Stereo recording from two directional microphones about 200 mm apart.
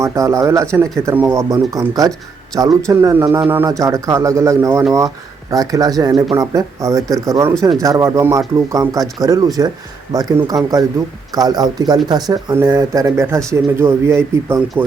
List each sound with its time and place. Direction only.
0.0 s speech: 15° right (ahead or behind)